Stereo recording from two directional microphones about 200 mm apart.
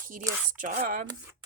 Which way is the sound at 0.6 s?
40° right (ahead or behind).